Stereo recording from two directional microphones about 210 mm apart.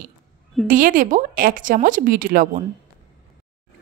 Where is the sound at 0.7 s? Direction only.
40° right (ahead or behind).